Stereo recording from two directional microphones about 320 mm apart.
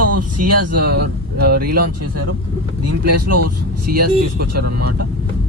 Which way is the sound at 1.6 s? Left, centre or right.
Right.